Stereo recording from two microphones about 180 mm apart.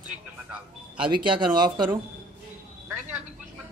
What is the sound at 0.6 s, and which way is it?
Speech, 5° right (ahead or behind).